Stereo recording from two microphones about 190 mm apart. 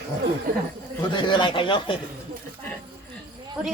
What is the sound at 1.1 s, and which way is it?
Speech, 25° left (ahead or behind).